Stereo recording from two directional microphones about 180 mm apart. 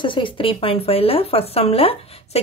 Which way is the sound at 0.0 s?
25° left (ahead or behind).